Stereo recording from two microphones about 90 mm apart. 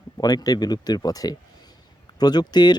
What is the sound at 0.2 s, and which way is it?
A man's voice, 45° left (ahead or behind).